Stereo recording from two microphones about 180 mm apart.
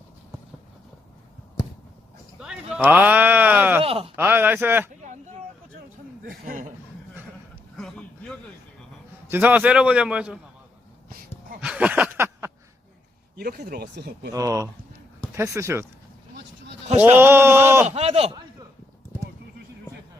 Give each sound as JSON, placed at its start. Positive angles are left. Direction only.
{"t": 2.4, "sound": "a sound", "side_deg": -5}
{"t": 3.8, "sound": "speech", "side_deg": -30}
{"t": 4.2, "sound": "a man's voice", "side_deg": -10}
{"t": 6.2, "sound": "a man's voice", "side_deg": -50}
{"t": 7.8, "sound": "a sound", "side_deg": 5}
{"t": 9.3, "sound": "a man's voice", "side_deg": -10}
{"t": 11.6, "sound": "a sound", "side_deg": -5}
{"t": 13.3, "sound": "speech", "side_deg": -55}
{"t": 14.3, "sound": "a man's voice", "side_deg": -20}
{"t": 17.0, "sound": "a man's voice", "side_deg": -10}
{"t": 17.8, "sound": "speech", "side_deg": -35}